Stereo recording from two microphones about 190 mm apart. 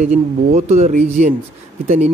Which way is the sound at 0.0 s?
35° right (ahead or behind).